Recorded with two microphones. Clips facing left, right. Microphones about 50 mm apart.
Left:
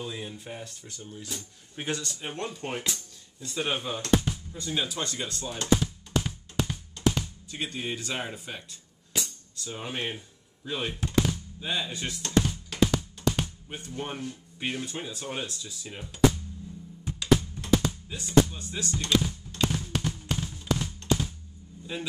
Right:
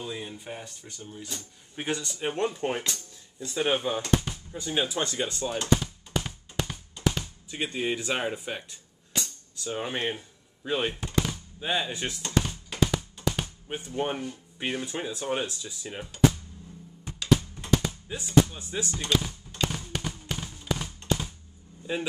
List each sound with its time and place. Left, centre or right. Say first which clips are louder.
0.0 s speech: right 1 dB; centre
2.1 s speech: right 6 dB; right
5.6 s music: left 3 dB; centre
7.5 s speech: right 4 dB; right
9.1 s music: even; centre
9.7 s speech: right 5 dB; right
9.9 s speech: right 3 dB; centre
12.2 s drum: left 5 dB; centre
13.7 s speech: right 6 dB; right
14.1 s speech: right 2 dB; centre
17.0 s computer keyboard: left 1 dB; centre
18.0 s speech: even; centre
19.0 s a sound: left 3 dB; centre